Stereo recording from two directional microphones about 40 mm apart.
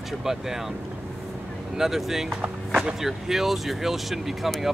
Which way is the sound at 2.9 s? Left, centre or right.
Centre.